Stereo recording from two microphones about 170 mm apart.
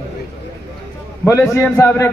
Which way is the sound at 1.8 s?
15° left (ahead or behind).